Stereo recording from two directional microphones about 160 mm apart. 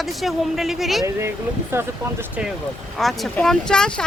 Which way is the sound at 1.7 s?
15° right (ahead or behind).